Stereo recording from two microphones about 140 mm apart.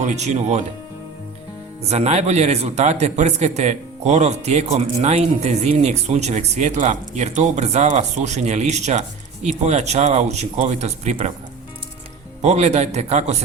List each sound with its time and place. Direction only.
0.0 s speech: 55° right (ahead or behind)
1.9 s a man's voice: 50° right (ahead or behind)
12.4 s a man's voice: 55° right (ahead or behind)